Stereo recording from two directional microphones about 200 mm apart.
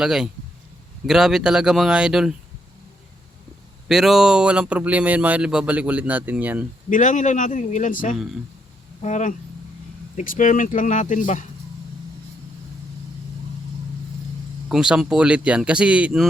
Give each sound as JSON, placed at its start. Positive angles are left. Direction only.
{"t": 0.0, "sound": "speech", "side_deg": 0}
{"t": 3.8, "sound": "speech", "side_deg": 0}
{"t": 6.9, "sound": "speech", "side_deg": 40}
{"t": 14.7, "sound": "speech", "side_deg": -5}